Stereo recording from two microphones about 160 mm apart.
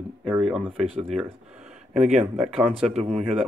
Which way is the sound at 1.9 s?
45° right (ahead or behind).